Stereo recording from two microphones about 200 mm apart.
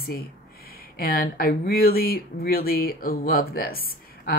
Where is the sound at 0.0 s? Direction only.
50° left (ahead or behind).